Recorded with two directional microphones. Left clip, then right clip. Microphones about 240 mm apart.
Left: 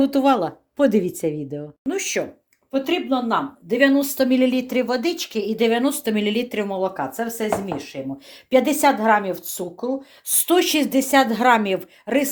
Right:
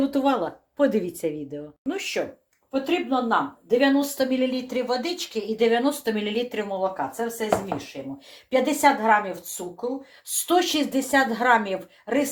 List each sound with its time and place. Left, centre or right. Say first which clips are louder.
0.0 s speech: left 5 dB; left
2.7 s a woman's voice: left 2 dB; left
8.4 s a woman's voice: left 3 dB; left